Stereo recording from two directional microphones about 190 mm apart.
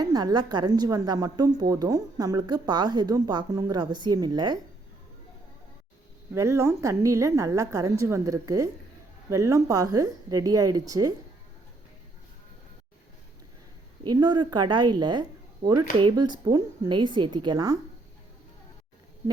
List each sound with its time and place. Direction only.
0.0 s a woman's voice: 20° right (ahead or behind)
6.3 s a woman's voice: 15° right (ahead or behind)
14.0 s a woman's voice: 20° right (ahead or behind)